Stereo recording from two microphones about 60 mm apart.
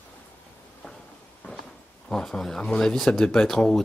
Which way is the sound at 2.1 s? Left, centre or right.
Centre.